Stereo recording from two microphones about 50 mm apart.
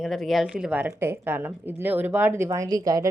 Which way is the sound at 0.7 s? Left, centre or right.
Right.